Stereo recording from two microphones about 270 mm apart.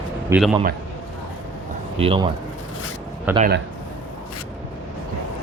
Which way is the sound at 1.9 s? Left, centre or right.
Right.